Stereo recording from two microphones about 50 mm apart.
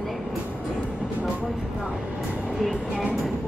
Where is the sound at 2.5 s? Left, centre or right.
Centre.